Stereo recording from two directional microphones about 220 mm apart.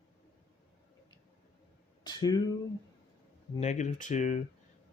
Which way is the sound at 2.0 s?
20° left (ahead or behind).